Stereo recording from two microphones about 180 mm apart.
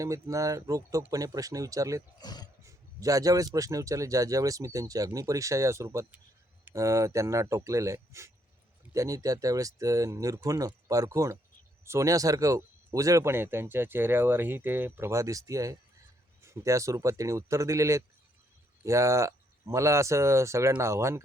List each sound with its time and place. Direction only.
0.0 s speech: 15° right (ahead or behind)
2.2 s speech: 20° left (ahead or behind)
2.6 s speech: 20° right (ahead or behind)